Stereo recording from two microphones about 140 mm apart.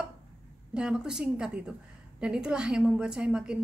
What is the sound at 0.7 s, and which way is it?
A woman's voice, 5° right (ahead or behind).